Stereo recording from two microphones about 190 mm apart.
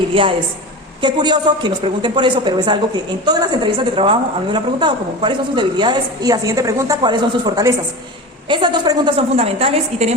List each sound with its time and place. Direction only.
0.1 s a woman's voice: 30° right (ahead or behind)